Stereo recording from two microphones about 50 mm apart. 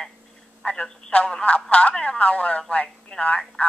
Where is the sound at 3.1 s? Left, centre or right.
Centre.